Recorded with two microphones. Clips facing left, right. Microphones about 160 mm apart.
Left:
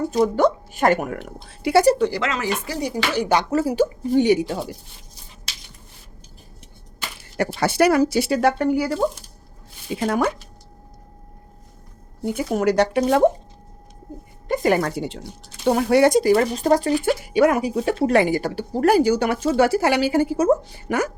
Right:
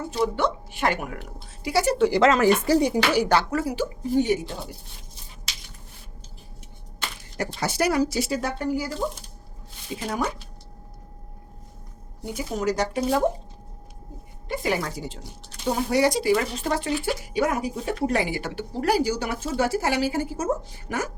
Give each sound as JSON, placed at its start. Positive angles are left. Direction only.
{"t": 0.1, "sound": "speech", "side_deg": 40}
{"t": 1.5, "sound": "speech", "side_deg": 60}
{"t": 2.2, "sound": "speech", "side_deg": -40}
{"t": 2.8, "sound": "speech", "side_deg": -15}
{"t": 3.5, "sound": "speech", "side_deg": 30}
{"t": 4.2, "sound": "speech", "side_deg": 80}
{"t": 7.3, "sound": "speech", "side_deg": 65}
{"t": 12.2, "sound": "speech", "side_deg": 60}
{"t": 14.4, "sound": "speech", "side_deg": 45}
{"t": 17.3, "sound": "speech", "side_deg": 70}
{"t": 18.3, "sound": "speech", "side_deg": 40}